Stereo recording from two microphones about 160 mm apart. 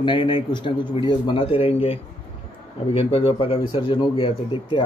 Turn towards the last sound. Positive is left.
turn(degrees=30)  # may be behind; listen again after turning